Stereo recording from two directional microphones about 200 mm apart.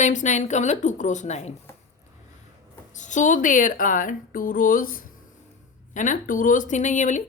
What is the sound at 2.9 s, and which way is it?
Speech, 40° left (ahead or behind).